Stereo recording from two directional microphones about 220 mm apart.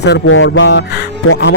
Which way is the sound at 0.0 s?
55° left (ahead or behind).